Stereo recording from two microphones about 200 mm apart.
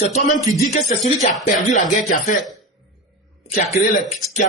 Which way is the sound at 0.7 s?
35° left (ahead or behind).